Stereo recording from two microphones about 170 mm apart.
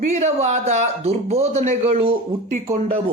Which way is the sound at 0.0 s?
45° right (ahead or behind).